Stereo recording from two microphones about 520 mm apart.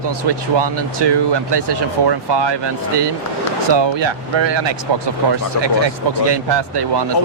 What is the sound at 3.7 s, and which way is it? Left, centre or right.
Speech, right.